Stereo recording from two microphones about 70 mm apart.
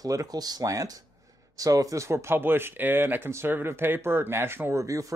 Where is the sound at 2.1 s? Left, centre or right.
Right.